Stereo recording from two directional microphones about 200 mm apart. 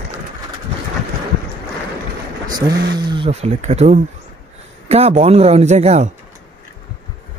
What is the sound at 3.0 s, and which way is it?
Speech, 25° right (ahead or behind).